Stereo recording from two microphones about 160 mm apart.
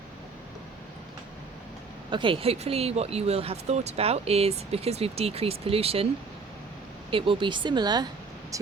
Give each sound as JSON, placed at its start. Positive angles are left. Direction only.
{"t": 2.0, "sound": "speech", "side_deg": -30}
{"t": 7.1, "sound": "speech", "side_deg": -35}